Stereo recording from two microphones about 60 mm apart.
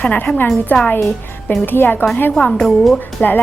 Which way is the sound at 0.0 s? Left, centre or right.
Left.